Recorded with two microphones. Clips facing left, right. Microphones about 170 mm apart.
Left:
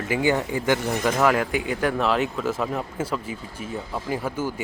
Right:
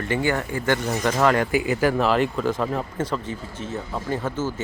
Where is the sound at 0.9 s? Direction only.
Centre (ahead or behind).